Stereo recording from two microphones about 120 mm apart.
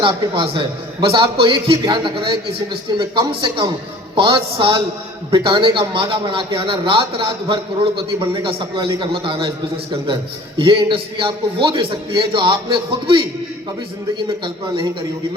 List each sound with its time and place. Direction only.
0.0 s a man's voice: 45° right (ahead or behind)
10.6 s a man's voice: 45° right (ahead or behind)
14.3 s a man's voice: 40° right (ahead or behind)